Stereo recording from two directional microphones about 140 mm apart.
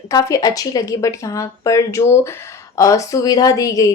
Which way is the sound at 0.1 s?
25° left (ahead or behind).